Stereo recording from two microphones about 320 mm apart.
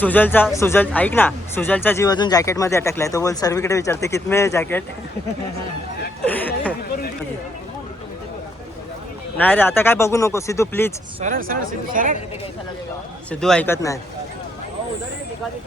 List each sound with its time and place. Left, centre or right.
0.0 s speech: centre
6.2 s a man's voice: centre
9.4 s speech: centre
11.2 s speech: right
13.3 s a man's voice: centre